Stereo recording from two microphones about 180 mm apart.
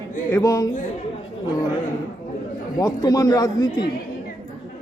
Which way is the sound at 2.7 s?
20° left (ahead or behind).